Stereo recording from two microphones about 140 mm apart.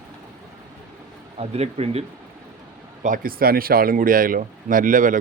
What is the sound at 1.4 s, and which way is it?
Speech, 50° right (ahead or behind).